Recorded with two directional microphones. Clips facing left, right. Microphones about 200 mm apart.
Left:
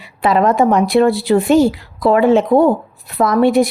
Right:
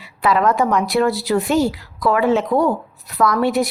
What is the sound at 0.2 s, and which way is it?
A woman's voice, 25° left (ahead or behind).